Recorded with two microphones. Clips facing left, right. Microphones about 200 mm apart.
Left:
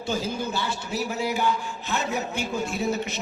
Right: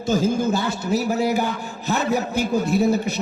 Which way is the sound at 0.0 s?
45° right (ahead or behind).